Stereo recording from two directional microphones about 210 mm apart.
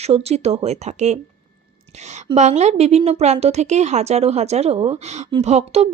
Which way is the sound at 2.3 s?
30° right (ahead or behind).